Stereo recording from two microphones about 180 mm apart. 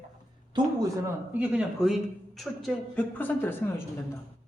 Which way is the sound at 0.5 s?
20° right (ahead or behind).